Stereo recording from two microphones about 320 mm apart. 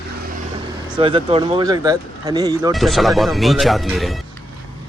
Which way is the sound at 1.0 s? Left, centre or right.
Centre.